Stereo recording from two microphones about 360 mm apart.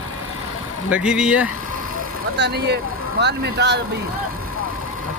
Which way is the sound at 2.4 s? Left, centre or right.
Right.